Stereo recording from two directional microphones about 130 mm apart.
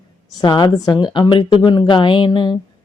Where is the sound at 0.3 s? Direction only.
35° left (ahead or behind).